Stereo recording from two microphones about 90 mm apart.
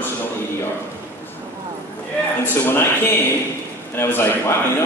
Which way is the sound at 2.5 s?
25° left (ahead or behind).